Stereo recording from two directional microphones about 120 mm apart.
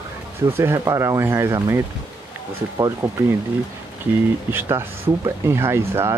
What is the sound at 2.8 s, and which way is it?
Speech, 25° right (ahead or behind).